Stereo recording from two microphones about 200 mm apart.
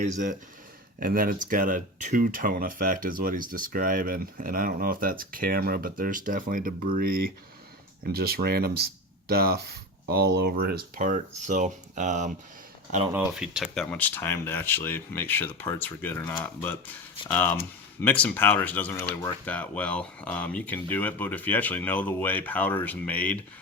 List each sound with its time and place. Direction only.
0.0 s speech: 40° right (ahead or behind)
13.1 s speech: 5° right (ahead or behind)